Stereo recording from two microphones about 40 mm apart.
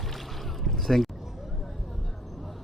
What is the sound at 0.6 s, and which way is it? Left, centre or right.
Boat, centre.